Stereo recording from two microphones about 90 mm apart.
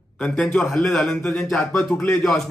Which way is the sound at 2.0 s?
15° left (ahead or behind).